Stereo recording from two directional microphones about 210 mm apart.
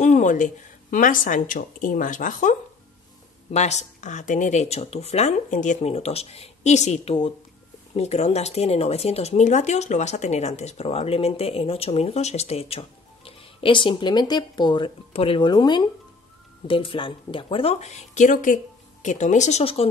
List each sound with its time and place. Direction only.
0.0 s speech: 35° left (ahead or behind)
3.5 s speech: 35° left (ahead or behind)